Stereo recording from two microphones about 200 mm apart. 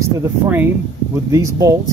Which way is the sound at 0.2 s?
10° right (ahead or behind).